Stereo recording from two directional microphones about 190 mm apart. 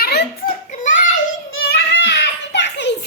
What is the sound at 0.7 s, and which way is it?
Child singing, 40° left (ahead or behind).